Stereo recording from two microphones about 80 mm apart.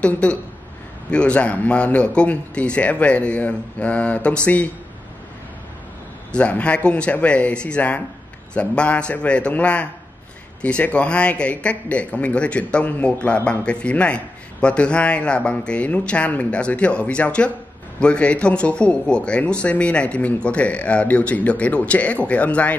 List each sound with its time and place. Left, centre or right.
0.0 s speech: centre
6.3 s speech: centre